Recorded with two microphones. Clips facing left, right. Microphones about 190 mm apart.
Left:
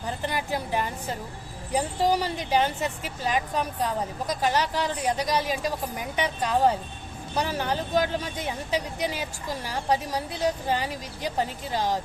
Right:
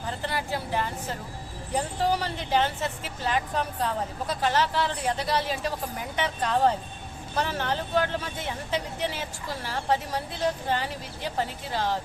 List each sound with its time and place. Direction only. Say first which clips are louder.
0.2 s speech: left 2 dB; 15° left (ahead or behind)